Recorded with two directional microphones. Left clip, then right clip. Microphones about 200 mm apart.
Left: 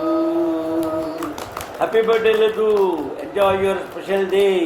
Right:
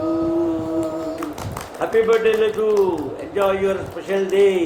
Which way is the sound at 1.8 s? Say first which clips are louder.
Left 2 dB; 10° left (ahead or behind).